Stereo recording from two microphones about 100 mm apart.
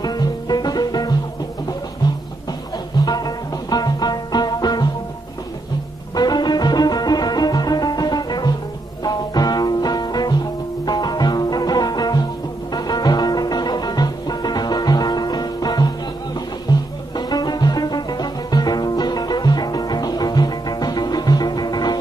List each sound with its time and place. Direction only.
0.0 s music: 40° left (ahead or behind)
3.1 s music: 40° left (ahead or behind)
6.1 s music: 45° left (ahead or behind)
17.3 s music: 45° left (ahead or behind)